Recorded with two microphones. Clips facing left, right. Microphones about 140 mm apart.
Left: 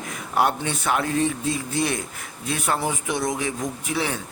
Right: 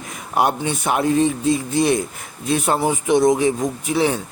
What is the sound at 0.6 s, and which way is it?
Speech, 15° right (ahead or behind).